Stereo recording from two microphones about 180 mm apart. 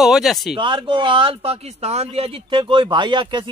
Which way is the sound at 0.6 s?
25° right (ahead or behind).